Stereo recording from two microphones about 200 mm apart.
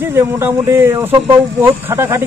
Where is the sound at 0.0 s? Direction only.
10° right (ahead or behind).